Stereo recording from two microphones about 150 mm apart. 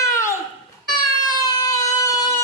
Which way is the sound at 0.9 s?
25° left (ahead or behind).